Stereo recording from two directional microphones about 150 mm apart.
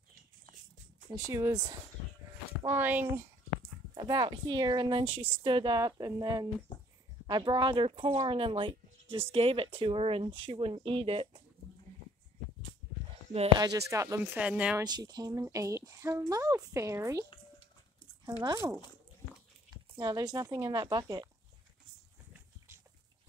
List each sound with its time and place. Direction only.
1.1 s speech: 20° right (ahead or behind)
3.9 s speech: 25° right (ahead or behind)
13.6 s speech: 25° right (ahead or behind); by 14.8 s 5° right (ahead or behind)
14.8 s speech: 25° right (ahead or behind)
18.4 s speech: 25° right (ahead or behind)